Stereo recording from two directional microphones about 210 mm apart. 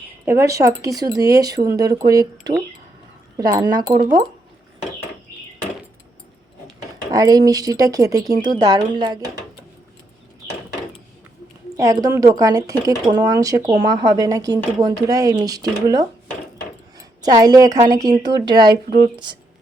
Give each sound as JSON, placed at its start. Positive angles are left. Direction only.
{"t": 0.3, "sound": "speech", "side_deg": -15}
{"t": 7.1, "sound": "speech", "side_deg": -15}
{"t": 11.8, "sound": "speech", "side_deg": -15}
{"t": 17.2, "sound": "speech", "side_deg": -20}